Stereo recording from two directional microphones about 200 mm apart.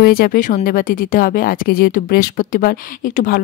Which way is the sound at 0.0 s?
50° left (ahead or behind).